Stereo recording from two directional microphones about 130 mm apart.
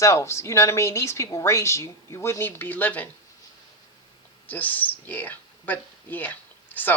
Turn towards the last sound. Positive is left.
turn(degrees=15)  # may be behind; listen again after turning